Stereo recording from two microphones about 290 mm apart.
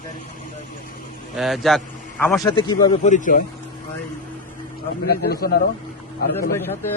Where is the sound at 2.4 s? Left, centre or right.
Centre.